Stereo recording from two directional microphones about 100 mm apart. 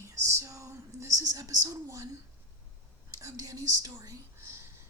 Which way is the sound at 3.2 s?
35° right (ahead or behind).